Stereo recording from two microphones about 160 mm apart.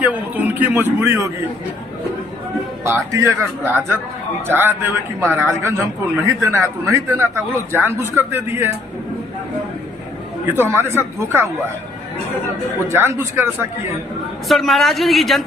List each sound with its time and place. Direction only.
0.0 s speech: 10° right (ahead or behind)
2.8 s speech: 20° right (ahead or behind)
10.4 s speech: 15° right (ahead or behind)
12.9 s speech: 15° right (ahead or behind)
14.4 s speech: centre (ahead or behind)